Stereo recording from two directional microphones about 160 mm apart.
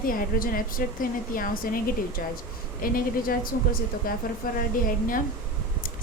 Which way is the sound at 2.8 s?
65° left (ahead or behind).